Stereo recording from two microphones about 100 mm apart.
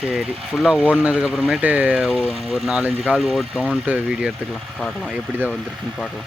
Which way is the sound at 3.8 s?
15° right (ahead or behind).